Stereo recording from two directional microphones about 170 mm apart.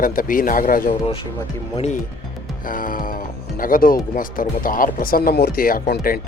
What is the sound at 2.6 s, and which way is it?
Speech, 55° left (ahead or behind).